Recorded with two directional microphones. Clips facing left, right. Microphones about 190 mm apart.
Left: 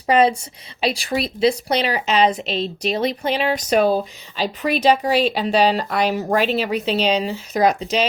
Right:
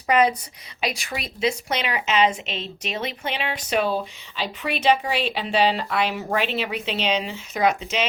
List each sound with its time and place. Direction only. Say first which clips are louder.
0.1 s a woman's voice: left 4 dB; 30° left (ahead or behind)